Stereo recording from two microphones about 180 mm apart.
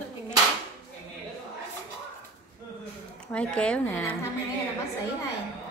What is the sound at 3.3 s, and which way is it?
Speech, 5° left (ahead or behind).